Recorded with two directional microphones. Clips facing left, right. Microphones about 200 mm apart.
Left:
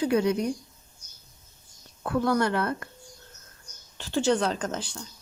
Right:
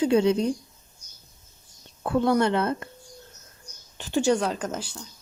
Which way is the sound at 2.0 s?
25° right (ahead or behind).